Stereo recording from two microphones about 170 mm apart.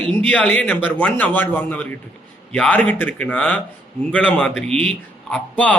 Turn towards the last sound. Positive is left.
turn(degrees=10)  # may be behind; listen again after turning